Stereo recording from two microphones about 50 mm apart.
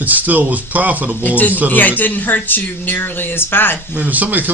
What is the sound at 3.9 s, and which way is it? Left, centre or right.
Speech, right.